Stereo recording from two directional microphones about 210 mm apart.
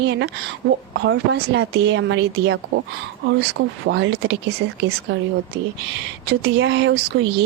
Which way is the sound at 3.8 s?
60° right (ahead or behind).